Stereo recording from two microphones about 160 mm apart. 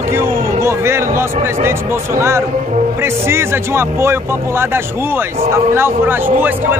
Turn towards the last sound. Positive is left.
turn(degrees=-10)  # may be behind; listen again after turning